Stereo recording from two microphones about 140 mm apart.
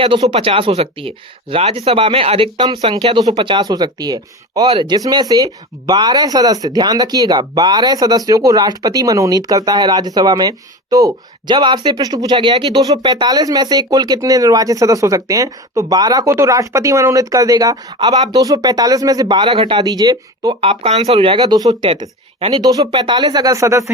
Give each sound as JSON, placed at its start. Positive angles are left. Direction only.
{"t": 0.3, "sound": "speech", "side_deg": -40}
{"t": 19.8, "sound": "speech", "side_deg": -25}
{"t": 20.6, "sound": "speech", "side_deg": -45}